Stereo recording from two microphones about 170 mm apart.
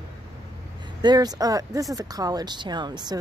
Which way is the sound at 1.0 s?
25° right (ahead or behind).